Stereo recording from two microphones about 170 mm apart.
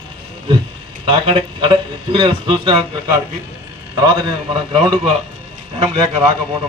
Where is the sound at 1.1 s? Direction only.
30° right (ahead or behind).